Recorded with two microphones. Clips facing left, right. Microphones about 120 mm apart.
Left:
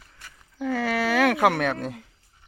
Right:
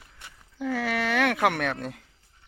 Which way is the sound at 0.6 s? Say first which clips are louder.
Left 3 dB; centre (ahead or behind).